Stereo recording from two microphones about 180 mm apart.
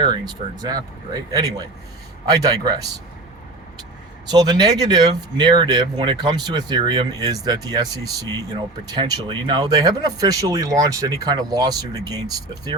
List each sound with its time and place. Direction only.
0.0 s speech: 20° right (ahead or behind)
4.3 s speech: 20° right (ahead or behind)